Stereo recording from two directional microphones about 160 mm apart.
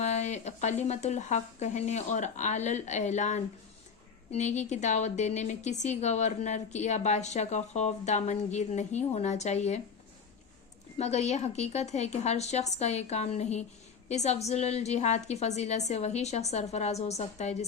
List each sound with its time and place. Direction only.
0.0 s a woman's voice: 45° left (ahead or behind)
10.9 s a woman's voice: 45° left (ahead or behind)